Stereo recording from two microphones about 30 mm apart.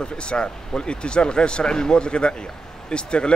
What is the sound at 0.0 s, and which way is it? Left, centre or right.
Speech, left.